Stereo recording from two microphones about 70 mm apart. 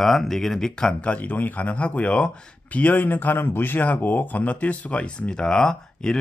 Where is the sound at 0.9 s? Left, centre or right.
Left.